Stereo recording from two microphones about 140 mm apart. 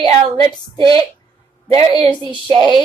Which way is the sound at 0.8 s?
40° right (ahead or behind).